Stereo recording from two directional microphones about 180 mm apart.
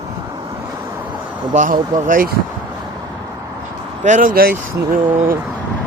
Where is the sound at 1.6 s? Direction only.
50° right (ahead or behind).